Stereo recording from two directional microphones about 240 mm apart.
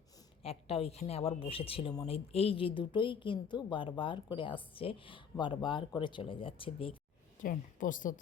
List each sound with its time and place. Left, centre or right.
0.4 s a woman's voice: left
7.4 s a woman's voice: left